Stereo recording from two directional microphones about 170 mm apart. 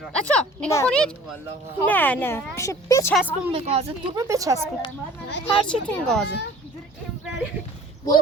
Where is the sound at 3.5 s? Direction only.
40° right (ahead or behind).